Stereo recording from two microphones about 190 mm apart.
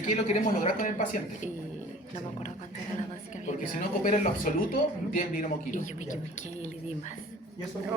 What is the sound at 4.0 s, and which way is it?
A woman's voice, 45° left (ahead or behind).